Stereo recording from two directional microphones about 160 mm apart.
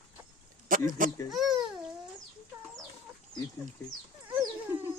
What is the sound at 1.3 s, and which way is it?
Babbling, centre (ahead or behind).